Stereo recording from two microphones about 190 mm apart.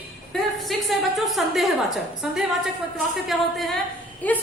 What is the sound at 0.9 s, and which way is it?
A woman's voice, centre (ahead or behind).